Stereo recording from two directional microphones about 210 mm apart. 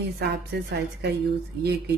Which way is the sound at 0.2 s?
50° right (ahead or behind).